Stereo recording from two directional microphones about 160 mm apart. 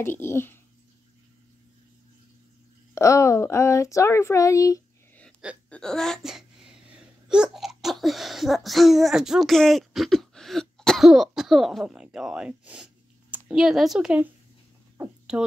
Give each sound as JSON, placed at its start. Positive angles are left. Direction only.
{"t": 0.0, "sound": "speech", "side_deg": 15}
{"t": 2.9, "sound": "speech", "side_deg": 20}
{"t": 5.7, "sound": "speech", "side_deg": 5}